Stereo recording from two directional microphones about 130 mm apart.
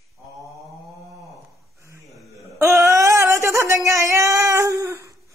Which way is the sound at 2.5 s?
20° right (ahead or behind).